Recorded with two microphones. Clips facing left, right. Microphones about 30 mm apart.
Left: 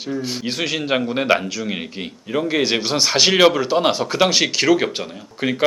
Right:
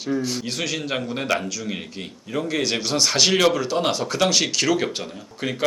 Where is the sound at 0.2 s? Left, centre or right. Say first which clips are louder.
Left 2 dB; left.